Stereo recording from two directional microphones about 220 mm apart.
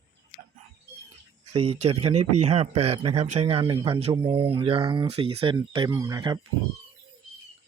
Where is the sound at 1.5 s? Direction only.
30° right (ahead or behind).